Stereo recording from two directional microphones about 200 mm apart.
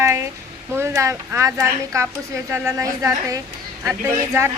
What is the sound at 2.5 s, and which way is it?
Speech, 15° right (ahead or behind).